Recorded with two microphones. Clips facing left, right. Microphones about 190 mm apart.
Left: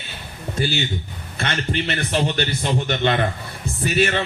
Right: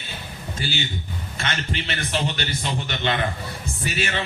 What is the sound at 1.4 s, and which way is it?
A man's voice, 50° left (ahead or behind).